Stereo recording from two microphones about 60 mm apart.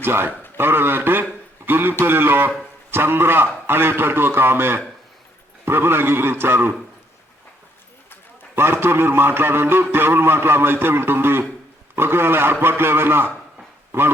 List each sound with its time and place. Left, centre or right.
0.0 s a man's voice: right
8.5 s a man's voice: right